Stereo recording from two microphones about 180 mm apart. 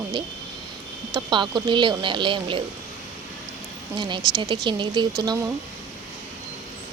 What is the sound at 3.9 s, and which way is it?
Speech, 25° right (ahead or behind).